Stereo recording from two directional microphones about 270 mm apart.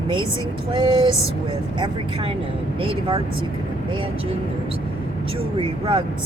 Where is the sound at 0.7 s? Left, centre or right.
Centre.